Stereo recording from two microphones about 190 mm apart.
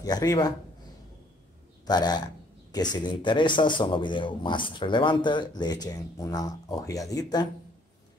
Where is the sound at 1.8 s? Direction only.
20° left (ahead or behind).